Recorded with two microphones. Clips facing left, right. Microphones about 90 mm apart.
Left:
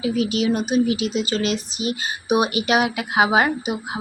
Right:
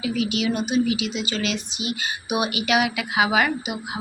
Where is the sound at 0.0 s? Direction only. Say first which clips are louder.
Left 3 dB; 40° left (ahead or behind).